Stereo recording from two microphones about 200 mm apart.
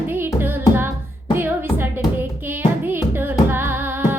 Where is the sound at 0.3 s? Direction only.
10° right (ahead or behind).